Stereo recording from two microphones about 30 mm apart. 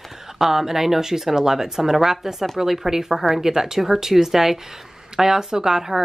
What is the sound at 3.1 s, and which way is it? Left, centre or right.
Speech, centre.